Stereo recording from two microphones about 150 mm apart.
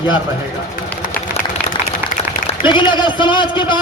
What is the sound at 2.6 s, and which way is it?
A man's voice, 30° left (ahead or behind).